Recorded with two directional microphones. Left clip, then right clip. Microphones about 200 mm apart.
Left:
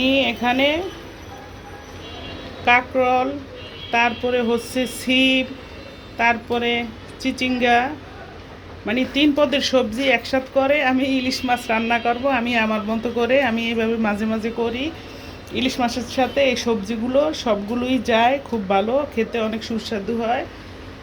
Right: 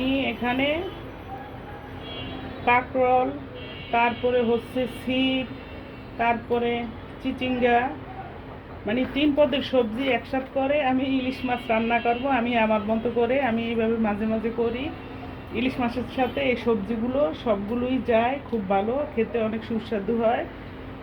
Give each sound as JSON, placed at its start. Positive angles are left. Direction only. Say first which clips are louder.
{"t": 0.0, "sound": "speech", "louder": "left 7 dB", "side_deg": 40}
{"t": 2.6, "sound": "a woman's voice", "louder": "left 4 dB", "side_deg": 30}
{"t": 8.9, "sound": "a woman's voice", "louder": "left 5 dB", "side_deg": 30}